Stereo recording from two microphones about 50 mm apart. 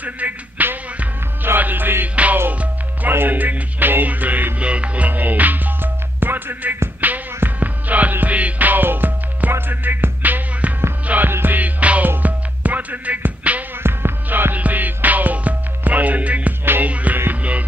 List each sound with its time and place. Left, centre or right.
0.0 s music: right
2.5 s speech: right
3.1 s music: right
4.6 s speech: right
7.0 s music: right
13.8 s music: right